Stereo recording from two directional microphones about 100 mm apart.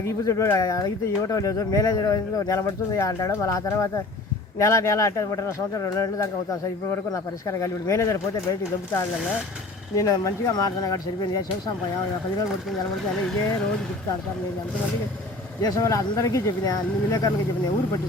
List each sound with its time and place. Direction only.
0.3 s speech: 30° left (ahead or behind)
7.6 s speech: 30° left (ahead or behind)
9.9 s speech: 35° left (ahead or behind)
15.6 s speech: 35° left (ahead or behind)